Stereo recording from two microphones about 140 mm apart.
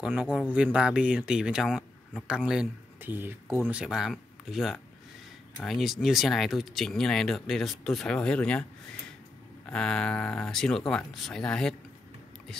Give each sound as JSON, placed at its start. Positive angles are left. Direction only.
{"t": 0.0, "sound": "speech", "side_deg": -10}
{"t": 3.7, "sound": "speech", "side_deg": -5}
{"t": 9.7, "sound": "speech", "side_deg": 5}